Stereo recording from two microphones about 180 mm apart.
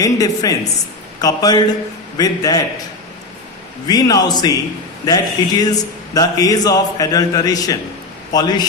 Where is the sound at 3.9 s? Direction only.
20° left (ahead or behind).